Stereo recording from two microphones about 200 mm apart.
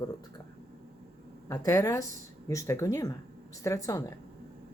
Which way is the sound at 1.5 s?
15° left (ahead or behind).